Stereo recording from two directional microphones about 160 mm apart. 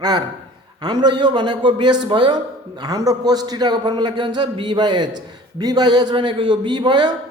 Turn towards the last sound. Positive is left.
turn(degrees=-25)  # may be behind; listen again after turning